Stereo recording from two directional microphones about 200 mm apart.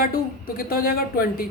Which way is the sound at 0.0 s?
45° left (ahead or behind).